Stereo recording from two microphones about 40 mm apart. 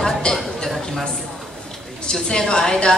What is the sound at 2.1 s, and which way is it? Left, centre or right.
Speech, centre.